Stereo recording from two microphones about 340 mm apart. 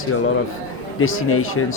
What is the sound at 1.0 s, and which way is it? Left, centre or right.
Speech, left.